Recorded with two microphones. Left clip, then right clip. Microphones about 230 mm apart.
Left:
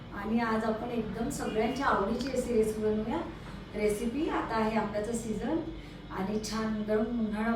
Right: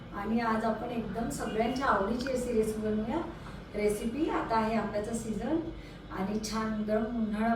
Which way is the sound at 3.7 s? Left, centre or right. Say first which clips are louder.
Even; centre.